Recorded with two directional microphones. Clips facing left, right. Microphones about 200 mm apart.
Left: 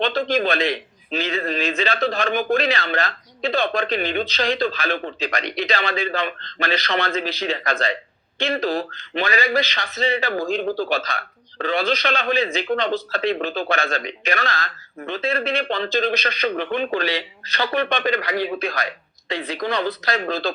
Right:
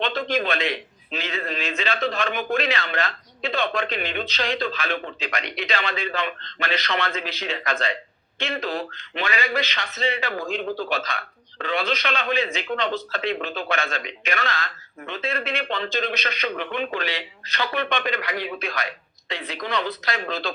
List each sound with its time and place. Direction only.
0.0 s speech: 35° left (ahead or behind)